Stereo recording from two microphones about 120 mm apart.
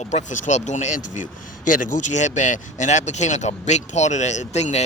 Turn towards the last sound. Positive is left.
turn(degrees=70)  # may be behind; listen again after turning